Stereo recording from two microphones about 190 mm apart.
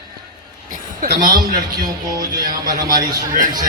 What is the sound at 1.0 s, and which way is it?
A man's voice, 50° right (ahead or behind).